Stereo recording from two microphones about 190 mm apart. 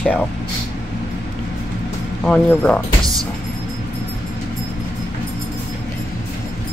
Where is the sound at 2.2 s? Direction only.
5° left (ahead or behind).